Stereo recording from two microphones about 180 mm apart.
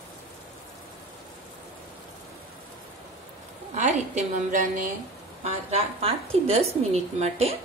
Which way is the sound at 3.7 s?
40° right (ahead or behind).